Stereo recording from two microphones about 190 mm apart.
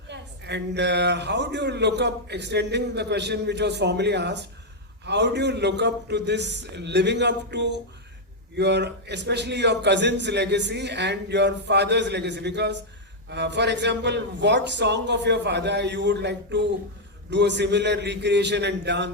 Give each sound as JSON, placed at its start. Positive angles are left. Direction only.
{"t": 0.1, "sound": "a woman's voice", "side_deg": -65}